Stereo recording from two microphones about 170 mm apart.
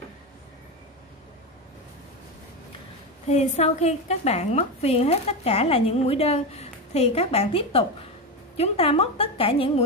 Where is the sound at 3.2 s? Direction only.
40° left (ahead or behind).